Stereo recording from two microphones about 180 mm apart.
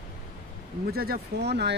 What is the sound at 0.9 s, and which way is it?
Speech, 60° right (ahead or behind).